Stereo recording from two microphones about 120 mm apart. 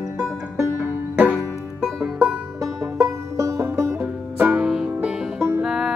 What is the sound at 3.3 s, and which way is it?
Music, 25° right (ahead or behind).